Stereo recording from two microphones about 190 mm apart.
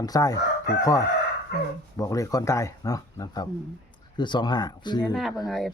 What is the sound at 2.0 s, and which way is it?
Speech, 15° left (ahead or behind).